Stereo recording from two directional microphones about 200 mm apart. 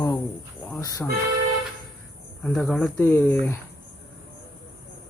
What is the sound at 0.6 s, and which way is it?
Cricket, 10° left (ahead or behind).